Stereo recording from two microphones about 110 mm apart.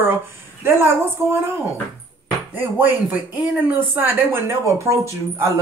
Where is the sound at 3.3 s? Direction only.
15° right (ahead or behind).